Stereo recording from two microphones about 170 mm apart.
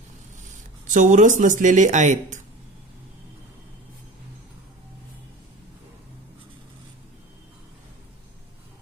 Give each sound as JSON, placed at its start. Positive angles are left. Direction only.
{"t": 0.9, "sound": "speech", "side_deg": -50}